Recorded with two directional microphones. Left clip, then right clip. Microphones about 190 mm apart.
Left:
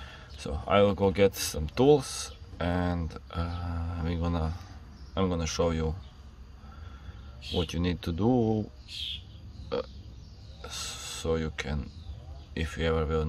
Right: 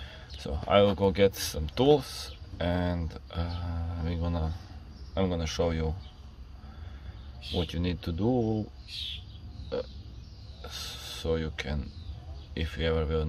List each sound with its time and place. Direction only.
0.0 s speech: 15° left (ahead or behind)
5.1 s speech: 15° left (ahead or behind)
7.6 s speech: 20° left (ahead or behind)
10.6 s speech: 20° left (ahead or behind)